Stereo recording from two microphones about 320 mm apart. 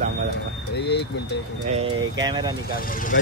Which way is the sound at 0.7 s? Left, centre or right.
Left.